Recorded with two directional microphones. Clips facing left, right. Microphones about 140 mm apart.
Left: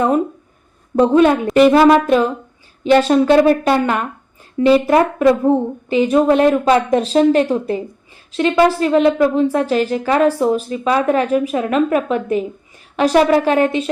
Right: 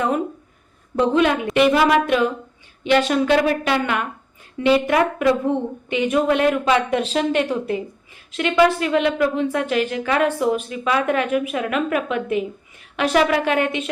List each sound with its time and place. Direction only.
0.9 s a woman's voice: 40° left (ahead or behind)